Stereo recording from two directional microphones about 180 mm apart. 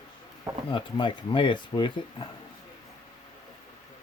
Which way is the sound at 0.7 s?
30° left (ahead or behind).